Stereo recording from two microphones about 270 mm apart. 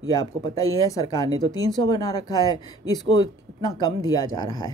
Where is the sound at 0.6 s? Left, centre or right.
Centre.